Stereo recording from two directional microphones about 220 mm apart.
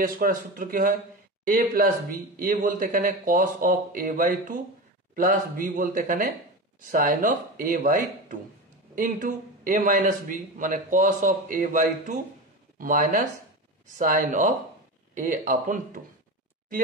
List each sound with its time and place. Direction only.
0.0 s a man's voice: 40° right (ahead or behind)